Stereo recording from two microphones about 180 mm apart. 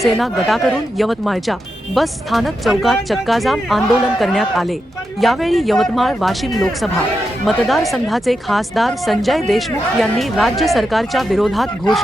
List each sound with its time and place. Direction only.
0.0 s speech: centre (ahead or behind)